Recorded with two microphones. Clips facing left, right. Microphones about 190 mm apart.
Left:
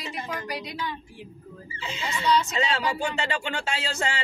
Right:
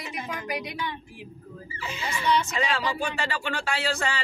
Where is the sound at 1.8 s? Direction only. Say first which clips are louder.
Left 1 dB; 25° left (ahead or behind).